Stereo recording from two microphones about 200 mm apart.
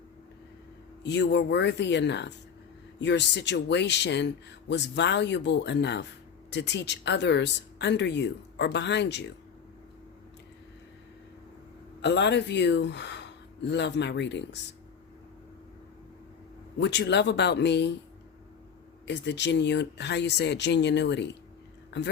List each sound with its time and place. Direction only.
1.0 s speech: 60° left (ahead or behind)
12.0 s speech: 60° left (ahead or behind)
16.8 s speech: 60° left (ahead or behind)
19.0 s speech: 60° left (ahead or behind)
21.8 s a sound: 60° left (ahead or behind)